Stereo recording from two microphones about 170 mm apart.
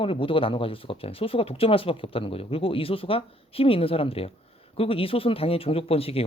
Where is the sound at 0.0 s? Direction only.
30° left (ahead or behind).